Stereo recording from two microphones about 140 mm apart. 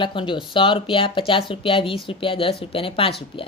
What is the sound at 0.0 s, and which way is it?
Speech, 35° left (ahead or behind).